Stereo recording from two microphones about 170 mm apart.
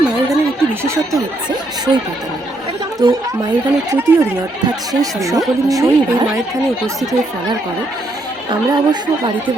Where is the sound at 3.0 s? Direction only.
25° right (ahead or behind).